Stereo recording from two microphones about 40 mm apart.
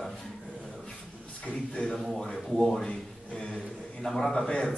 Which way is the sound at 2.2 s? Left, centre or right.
Centre.